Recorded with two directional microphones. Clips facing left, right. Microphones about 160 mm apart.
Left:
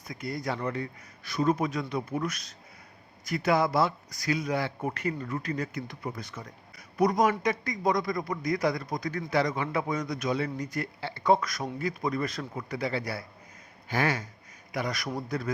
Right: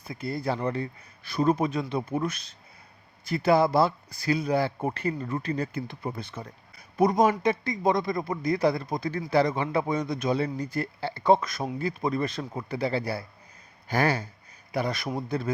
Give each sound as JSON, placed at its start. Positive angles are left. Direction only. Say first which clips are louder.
{"t": 0.1, "sound": "speech", "louder": "right 3 dB", "side_deg": -30}